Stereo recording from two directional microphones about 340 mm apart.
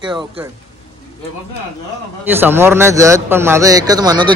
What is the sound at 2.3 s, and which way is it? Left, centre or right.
A man's voice, centre.